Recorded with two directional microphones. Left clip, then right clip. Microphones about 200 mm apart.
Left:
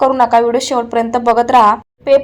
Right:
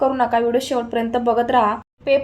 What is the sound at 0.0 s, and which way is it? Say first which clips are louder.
Speech: left 7 dB; 20° left (ahead or behind).